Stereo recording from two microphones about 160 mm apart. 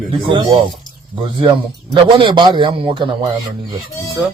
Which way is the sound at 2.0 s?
30° right (ahead or behind).